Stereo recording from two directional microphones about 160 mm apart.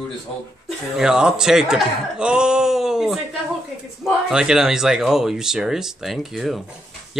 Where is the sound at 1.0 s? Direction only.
5° right (ahead or behind).